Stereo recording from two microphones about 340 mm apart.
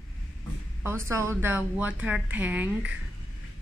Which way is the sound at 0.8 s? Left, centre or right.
Centre.